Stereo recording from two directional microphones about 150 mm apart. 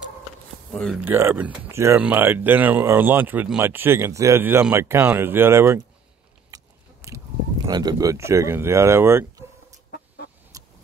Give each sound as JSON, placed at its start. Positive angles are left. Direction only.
{"t": 0.9, "sound": "speech", "side_deg": -15}
{"t": 6.5, "sound": "biting", "side_deg": -20}
{"t": 7.6, "sound": "speech", "side_deg": -25}
{"t": 9.8, "sound": "chicken", "side_deg": 90}
{"t": 10.5, "sound": "a sound", "side_deg": -20}